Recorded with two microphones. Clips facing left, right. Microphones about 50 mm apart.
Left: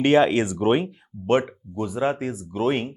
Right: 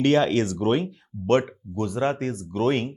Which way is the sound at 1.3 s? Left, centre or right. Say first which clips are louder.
Even; centre.